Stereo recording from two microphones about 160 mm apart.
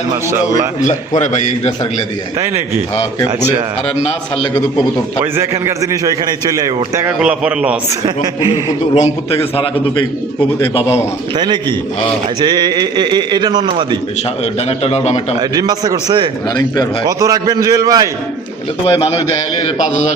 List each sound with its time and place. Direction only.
1.2 s a man's voice: 50° left (ahead or behind)
2.9 s a man's voice: 20° left (ahead or behind)
5.2 s a man's voice: 15° right (ahead or behind)
7.2 s a man's voice: 5° right (ahead or behind)
9.0 s a man's voice: 40° left (ahead or behind)
11.3 s a man's voice: 25° right (ahead or behind)
14.4 s a man's voice: 40° left (ahead or behind)
15.4 s a man's voice: 25° right (ahead or behind)
18.9 s a man's voice: 35° left (ahead or behind)